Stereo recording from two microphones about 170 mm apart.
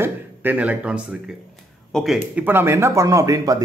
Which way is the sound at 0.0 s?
10° right (ahead or behind).